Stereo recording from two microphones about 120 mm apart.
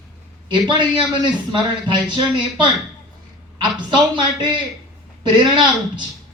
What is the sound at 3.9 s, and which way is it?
A man's voice, 40° right (ahead or behind).